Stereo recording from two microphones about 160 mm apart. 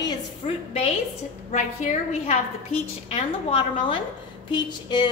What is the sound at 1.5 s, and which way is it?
Speech, 45° left (ahead or behind).